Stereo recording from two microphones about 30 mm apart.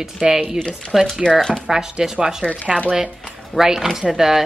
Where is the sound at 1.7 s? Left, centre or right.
Right.